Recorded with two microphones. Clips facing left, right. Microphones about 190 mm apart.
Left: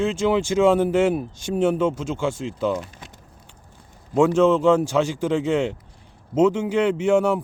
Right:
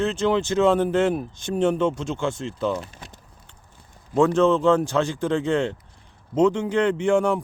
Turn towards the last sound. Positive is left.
turn(degrees=5)  # may be behind; listen again after turning